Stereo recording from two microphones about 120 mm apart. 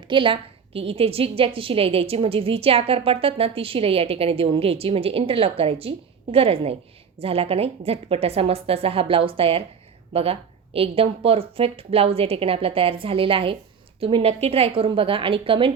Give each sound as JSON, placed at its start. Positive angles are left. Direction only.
{"t": 0.1, "sound": "a woman's voice", "side_deg": -45}